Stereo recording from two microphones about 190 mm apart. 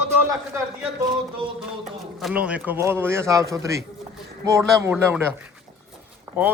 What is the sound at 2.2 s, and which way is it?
A man's voice, 5° right (ahead or behind).